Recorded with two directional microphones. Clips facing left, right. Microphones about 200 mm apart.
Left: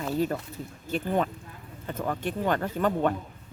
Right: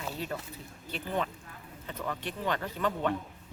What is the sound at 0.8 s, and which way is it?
Speech, 45° left (ahead or behind).